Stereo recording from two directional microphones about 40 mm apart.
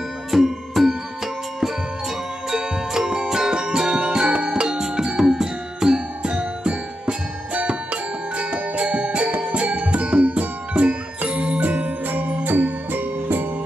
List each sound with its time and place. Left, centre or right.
0.3 s music: centre; by 11.0 s right
11.2 s jingle bell: right
11.6 s music: right